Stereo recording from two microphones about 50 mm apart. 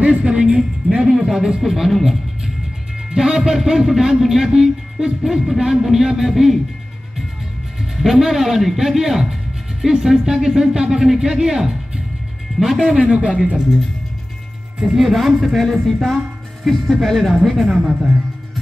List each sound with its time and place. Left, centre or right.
0.0 s music: right
0.6 s a man's voice: centre
7.9 s a man's voice: centre
12.9 s a man's voice: right
15.0 s speech: centre
17.7 s a man's voice: centre